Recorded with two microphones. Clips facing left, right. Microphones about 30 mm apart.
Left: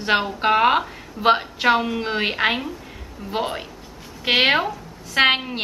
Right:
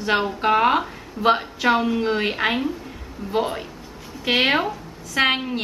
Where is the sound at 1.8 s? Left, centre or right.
Centre.